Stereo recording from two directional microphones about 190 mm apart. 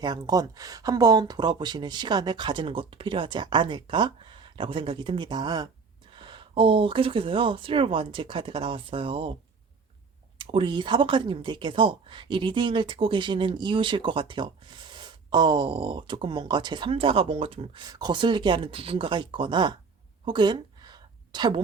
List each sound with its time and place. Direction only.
0.0 s speech: 20° right (ahead or behind)
10.3 s speech: 25° right (ahead or behind)
20.2 s a sound: 25° right (ahead or behind)